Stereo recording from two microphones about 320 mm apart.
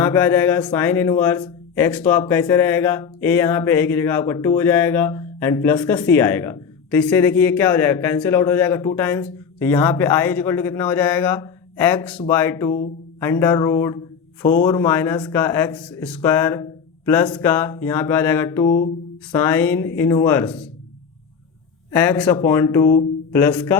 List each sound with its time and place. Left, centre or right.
0.0 s speech: centre
21.9 s speech: centre